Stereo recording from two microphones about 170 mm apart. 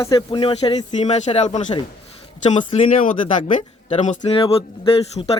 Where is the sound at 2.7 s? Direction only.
40° left (ahead or behind).